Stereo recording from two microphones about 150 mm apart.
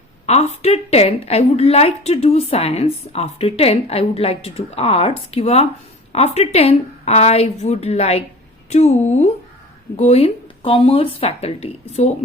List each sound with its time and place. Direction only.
0.3 s a woman's voice: 45° left (ahead or behind)